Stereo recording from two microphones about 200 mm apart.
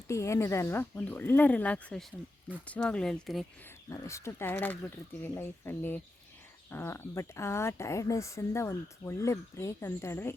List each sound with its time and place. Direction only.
0.1 s speech: 15° left (ahead or behind)
3.8 s speech: 15° left (ahead or behind)